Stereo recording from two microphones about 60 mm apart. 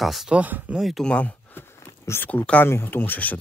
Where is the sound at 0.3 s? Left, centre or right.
Right.